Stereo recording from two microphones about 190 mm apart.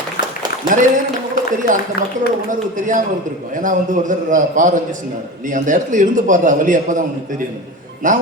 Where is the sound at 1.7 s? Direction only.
45° right (ahead or behind).